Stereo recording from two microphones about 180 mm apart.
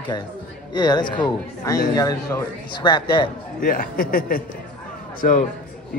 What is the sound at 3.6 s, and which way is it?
A man's voice, 50° left (ahead or behind).